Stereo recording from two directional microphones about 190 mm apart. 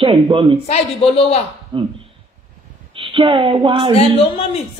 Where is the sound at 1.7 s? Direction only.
30° right (ahead or behind).